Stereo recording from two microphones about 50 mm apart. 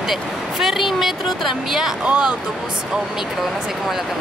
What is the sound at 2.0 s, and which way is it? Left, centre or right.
Speech, centre.